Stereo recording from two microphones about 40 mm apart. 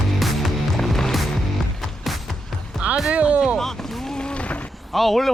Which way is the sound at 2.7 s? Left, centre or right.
Centre.